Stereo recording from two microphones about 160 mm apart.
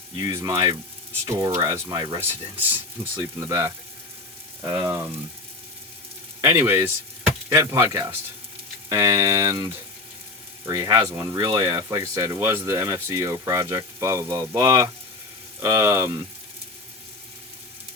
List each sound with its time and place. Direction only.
0.2 s speech: 20° right (ahead or behind)
6.4 s speech: 20° right (ahead or behind)